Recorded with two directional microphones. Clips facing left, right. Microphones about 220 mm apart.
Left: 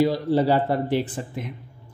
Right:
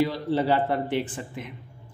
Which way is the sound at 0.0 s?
40° left (ahead or behind).